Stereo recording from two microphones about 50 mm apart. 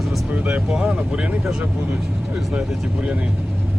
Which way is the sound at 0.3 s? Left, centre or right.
Right.